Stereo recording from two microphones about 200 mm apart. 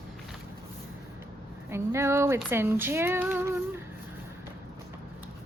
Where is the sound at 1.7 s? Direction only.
15° right (ahead or behind).